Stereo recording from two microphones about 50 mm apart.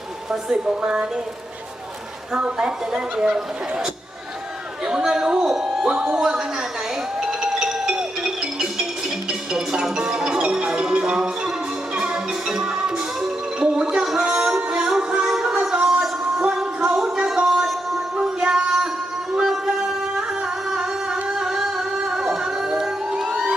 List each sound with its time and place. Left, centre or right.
0.3 s music: centre
2.3 s music: centre
4.9 s music: centre
13.9 s a sound: centre
14.3 s music: centre
17.3 s a sound: centre
18.4 s music: centre
19.3 s singing: centre
22.8 s crowd: centre